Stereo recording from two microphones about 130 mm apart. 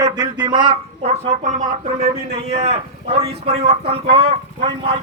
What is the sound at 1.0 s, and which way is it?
Speech, 60° right (ahead or behind).